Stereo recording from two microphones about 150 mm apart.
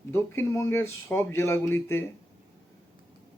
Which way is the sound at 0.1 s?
15° left (ahead or behind).